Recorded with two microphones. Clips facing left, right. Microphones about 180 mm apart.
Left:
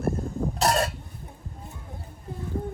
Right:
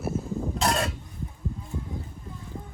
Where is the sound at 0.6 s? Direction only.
35° left (ahead or behind).